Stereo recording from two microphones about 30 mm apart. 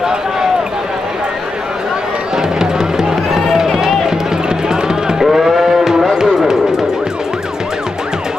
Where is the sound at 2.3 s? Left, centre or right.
Right.